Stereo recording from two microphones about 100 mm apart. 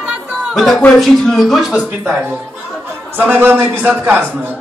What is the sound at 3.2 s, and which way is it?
Speech, 20° right (ahead or behind).